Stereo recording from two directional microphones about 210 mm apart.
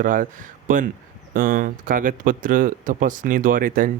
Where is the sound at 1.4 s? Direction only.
40° right (ahead or behind).